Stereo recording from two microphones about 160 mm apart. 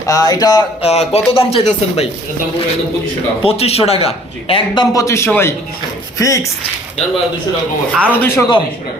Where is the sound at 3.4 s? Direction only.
40° left (ahead or behind); by 6.4 s 20° left (ahead or behind).